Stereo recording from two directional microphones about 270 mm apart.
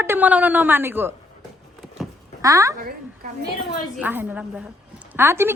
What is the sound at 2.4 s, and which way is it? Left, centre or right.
Speech, centre.